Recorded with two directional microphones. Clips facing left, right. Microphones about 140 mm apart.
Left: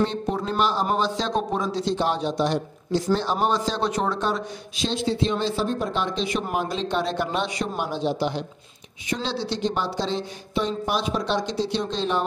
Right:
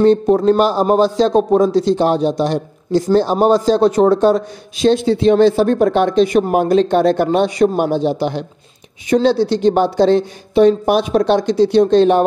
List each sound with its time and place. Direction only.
0.0 s a man's voice: 40° right (ahead or behind)
4.8 s speech: 55° right (ahead or behind)